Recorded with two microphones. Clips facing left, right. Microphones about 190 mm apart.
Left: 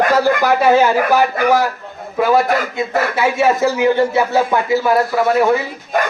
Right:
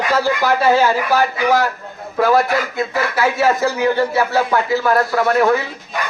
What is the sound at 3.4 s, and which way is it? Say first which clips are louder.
A man's voice: left 3 dB; 25° left (ahead or behind).